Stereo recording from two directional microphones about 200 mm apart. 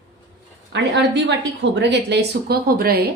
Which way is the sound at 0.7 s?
60° right (ahead or behind).